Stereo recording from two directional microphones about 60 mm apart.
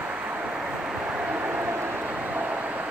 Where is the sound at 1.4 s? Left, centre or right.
Right.